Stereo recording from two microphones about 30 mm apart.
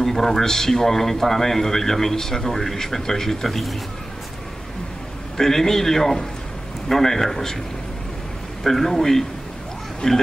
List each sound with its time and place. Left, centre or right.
0.0 s a man's voice: centre
3.4 s a man's voice: centre
5.4 s a man's voice: centre
8.6 s a man's voice: centre
10.0 s speech: left